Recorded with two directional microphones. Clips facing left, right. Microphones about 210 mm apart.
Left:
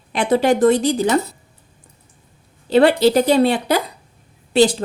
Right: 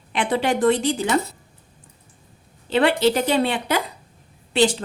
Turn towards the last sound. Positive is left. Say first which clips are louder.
# left 4 dB
turn(degrees=40)  # may be behind; listen again after turning